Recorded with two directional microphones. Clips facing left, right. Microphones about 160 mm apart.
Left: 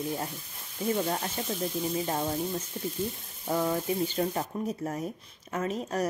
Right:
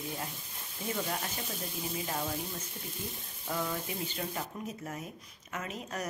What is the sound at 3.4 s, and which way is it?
Speech, 35° left (ahead or behind).